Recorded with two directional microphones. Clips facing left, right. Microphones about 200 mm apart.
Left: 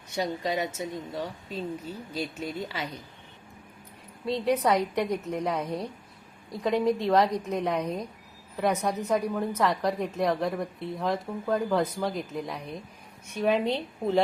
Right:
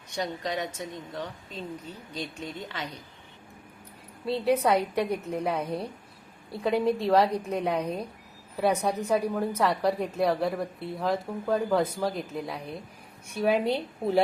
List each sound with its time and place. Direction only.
0.1 s a woman's voice: 5° left (ahead or behind)
4.3 s a woman's voice: 5° right (ahead or behind)
5.0 s a woman's voice: 30° right (ahead or behind)
5.4 s a woman's voice: centre (ahead or behind)